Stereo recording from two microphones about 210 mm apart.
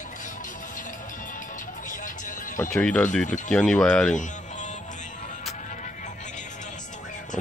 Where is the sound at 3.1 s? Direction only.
35° left (ahead or behind).